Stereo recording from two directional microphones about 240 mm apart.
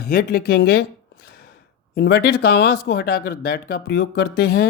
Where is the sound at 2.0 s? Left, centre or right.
Left.